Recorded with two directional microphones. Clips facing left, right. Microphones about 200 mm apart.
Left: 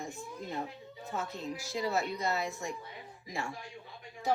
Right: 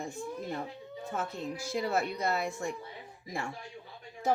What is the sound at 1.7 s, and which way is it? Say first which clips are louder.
Speech: right 2 dB; 55° right (ahead or behind).